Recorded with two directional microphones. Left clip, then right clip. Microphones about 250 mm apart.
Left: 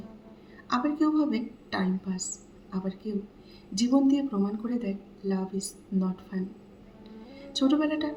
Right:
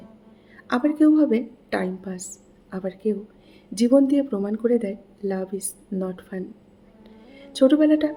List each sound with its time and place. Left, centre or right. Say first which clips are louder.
0.7 s a woman's voice: right 7 dB; right